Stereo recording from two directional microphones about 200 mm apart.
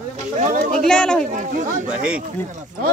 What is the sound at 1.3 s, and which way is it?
Speech, 40° right (ahead or behind).